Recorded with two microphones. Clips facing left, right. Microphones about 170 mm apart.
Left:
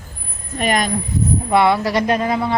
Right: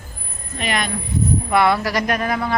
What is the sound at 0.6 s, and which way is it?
Speech, 45° left (ahead or behind).